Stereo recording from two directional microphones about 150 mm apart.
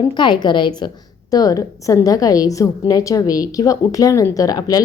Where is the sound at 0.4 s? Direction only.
30° left (ahead or behind).